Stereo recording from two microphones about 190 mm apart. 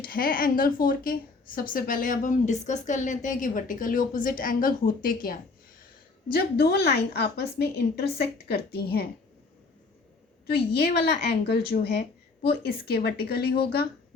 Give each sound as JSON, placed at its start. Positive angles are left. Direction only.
{"t": 0.0, "sound": "a woman's voice", "side_deg": 50}
{"t": 10.4, "sound": "a woman's voice", "side_deg": 55}